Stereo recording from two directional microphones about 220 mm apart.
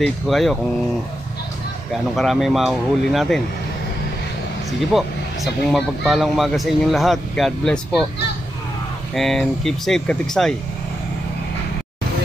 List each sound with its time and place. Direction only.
0.0 s speech: centre (ahead or behind)
2.1 s speech: centre (ahead or behind)
4.9 s speech: centre (ahead or behind)
9.1 s speech: centre (ahead or behind)